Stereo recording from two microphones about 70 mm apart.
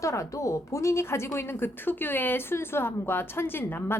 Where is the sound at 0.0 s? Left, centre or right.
Left.